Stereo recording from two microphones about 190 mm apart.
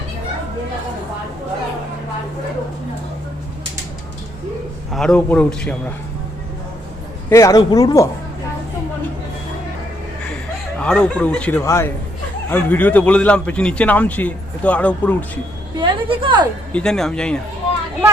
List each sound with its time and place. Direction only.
4.9 s a man's voice: 5° left (ahead or behind)
7.3 s a man's voice: 15° left (ahead or behind)
10.8 s a man's voice: 5° left (ahead or behind)
15.8 s a woman's voice: 25° right (ahead or behind)
16.7 s a man's voice: 5° left (ahead or behind)